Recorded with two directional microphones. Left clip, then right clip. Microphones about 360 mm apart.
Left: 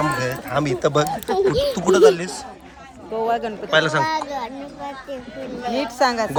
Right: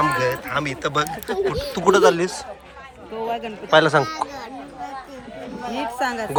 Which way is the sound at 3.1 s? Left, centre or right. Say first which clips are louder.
Left 5 dB; centre.